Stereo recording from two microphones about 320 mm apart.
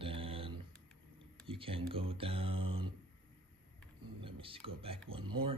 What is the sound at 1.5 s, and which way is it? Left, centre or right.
Speech, centre.